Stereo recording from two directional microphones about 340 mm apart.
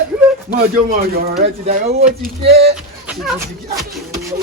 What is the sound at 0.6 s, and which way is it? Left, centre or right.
Speech, right.